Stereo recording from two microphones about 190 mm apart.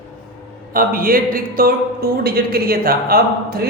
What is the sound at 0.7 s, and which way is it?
Speech, 50° right (ahead or behind).